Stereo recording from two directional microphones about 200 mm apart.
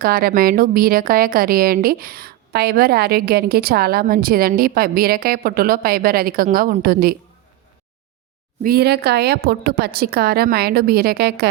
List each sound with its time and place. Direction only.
0.0 s a woman's voice: 45° right (ahead or behind)
8.6 s a woman's voice: 50° right (ahead or behind)